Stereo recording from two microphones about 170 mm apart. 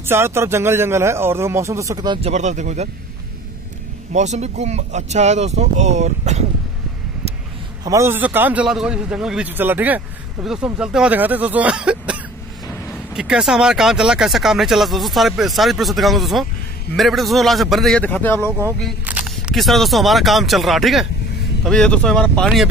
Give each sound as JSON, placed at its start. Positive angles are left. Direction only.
{"t": 0.0, "sound": "a man's voice", "side_deg": -15}
{"t": 2.2, "sound": "speech", "side_deg": -45}
{"t": 4.1, "sound": "speech", "side_deg": -45}
{"t": 7.8, "sound": "a man's voice", "side_deg": -15}
{"t": 19.0, "sound": "speech", "side_deg": -5}